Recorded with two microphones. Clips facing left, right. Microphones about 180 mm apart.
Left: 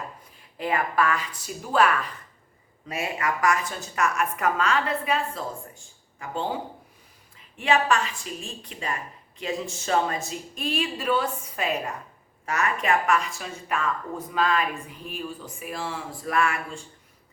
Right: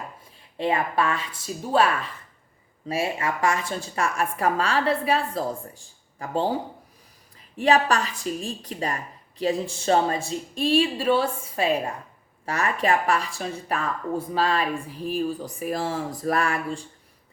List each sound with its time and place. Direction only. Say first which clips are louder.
0.5 s speech: right 2 dB; 25° right (ahead or behind)